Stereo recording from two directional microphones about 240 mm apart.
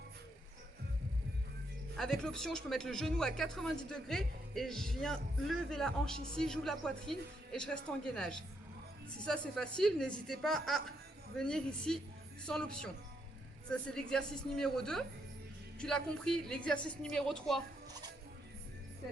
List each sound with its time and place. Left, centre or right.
2.0 s speech: centre